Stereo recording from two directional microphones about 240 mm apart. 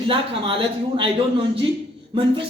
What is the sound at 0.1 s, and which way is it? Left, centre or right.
A man's voice, right.